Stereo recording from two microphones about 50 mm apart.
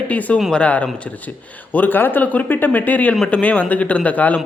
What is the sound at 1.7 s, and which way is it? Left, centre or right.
A man's voice, left.